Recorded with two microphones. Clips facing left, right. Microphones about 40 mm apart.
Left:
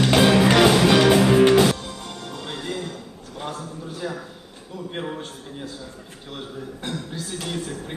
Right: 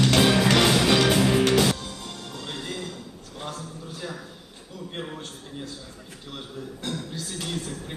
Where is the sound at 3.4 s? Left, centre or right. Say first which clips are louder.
Left 4 dB; centre.